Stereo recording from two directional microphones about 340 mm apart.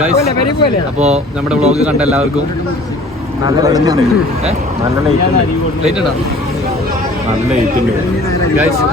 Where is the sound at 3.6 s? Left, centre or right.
Centre.